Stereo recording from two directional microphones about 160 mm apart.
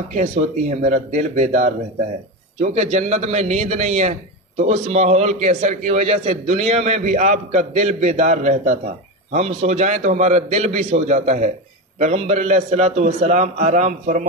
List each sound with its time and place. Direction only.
0.1 s a man's voice: 50° right (ahead or behind)